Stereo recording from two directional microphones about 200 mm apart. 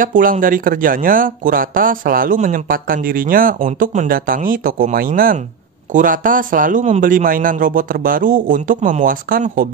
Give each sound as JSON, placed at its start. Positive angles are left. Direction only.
{"t": 0.0, "sound": "speech", "side_deg": -45}